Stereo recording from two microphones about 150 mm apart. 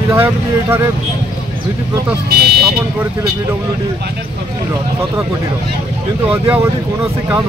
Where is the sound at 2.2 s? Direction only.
90° right.